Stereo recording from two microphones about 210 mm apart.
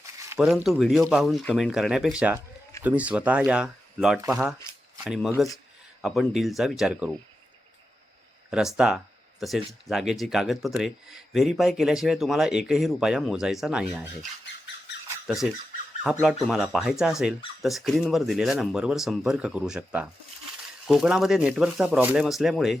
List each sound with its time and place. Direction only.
0.3 s speech: centre (ahead or behind)
8.4 s speech: 5° right (ahead or behind)
16.2 s speech: centre (ahead or behind)